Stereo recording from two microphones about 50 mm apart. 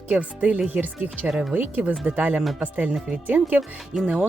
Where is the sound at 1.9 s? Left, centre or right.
Right.